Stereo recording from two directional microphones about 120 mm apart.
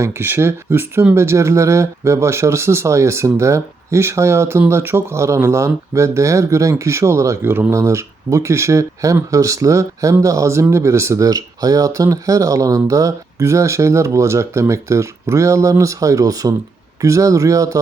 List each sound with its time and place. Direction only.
0.0 s speech: 20° right (ahead or behind)